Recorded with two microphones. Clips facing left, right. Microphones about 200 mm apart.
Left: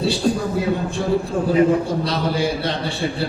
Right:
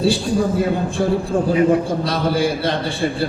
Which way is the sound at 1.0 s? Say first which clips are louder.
Right 3 dB; 50° right (ahead or behind).